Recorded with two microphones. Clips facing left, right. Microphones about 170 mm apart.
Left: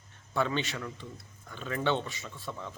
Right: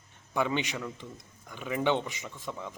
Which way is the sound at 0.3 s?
15° right (ahead or behind).